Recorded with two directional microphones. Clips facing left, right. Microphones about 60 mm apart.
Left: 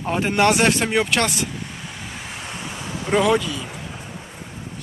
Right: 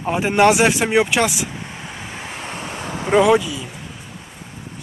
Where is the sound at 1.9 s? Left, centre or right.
Right.